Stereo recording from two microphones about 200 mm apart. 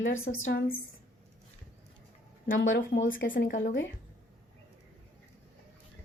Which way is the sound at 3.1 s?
45° left (ahead or behind).